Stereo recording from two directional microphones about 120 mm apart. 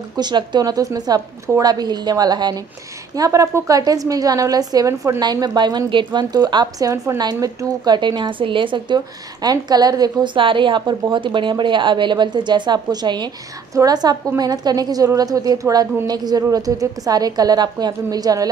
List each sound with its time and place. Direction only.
0.1 s a woman's voice: 35° right (ahead or behind)